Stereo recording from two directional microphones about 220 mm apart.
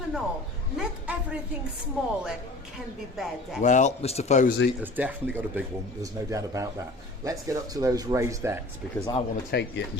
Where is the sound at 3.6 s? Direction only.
35° left (ahead or behind).